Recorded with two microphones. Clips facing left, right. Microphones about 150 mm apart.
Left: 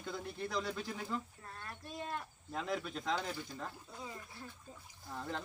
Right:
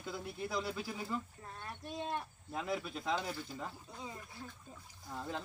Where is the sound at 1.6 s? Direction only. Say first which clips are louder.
Right 3 dB; 20° right (ahead or behind).